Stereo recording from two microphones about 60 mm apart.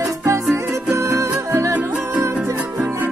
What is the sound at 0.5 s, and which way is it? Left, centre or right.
Music, right.